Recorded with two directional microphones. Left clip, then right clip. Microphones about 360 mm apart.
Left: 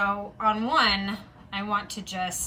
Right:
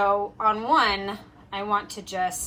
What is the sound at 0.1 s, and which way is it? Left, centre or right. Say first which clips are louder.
A woman's voice: right 3 dB; centre.